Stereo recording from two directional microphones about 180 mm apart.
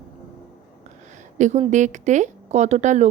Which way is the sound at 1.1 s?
40° right (ahead or behind).